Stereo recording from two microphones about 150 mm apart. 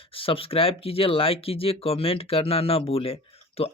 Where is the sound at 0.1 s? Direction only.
40° left (ahead or behind).